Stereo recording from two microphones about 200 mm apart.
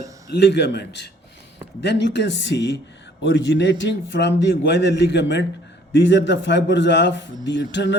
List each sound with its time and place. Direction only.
0.3 s a man's voice: 60° left (ahead or behind)